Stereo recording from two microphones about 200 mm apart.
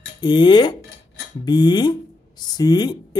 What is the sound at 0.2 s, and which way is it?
Speech, 20° left (ahead or behind).